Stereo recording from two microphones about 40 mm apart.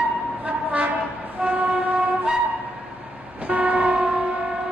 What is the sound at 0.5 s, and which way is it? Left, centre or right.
Train, right.